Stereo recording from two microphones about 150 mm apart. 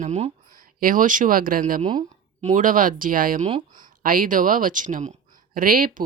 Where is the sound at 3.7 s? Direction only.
65° right (ahead or behind).